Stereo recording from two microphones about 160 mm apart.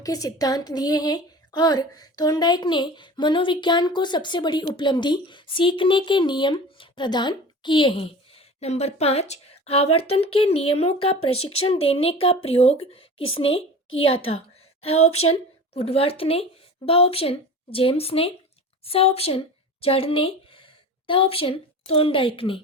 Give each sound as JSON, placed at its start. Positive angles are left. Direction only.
{"t": 0.0, "sound": "a woman's voice", "side_deg": 20}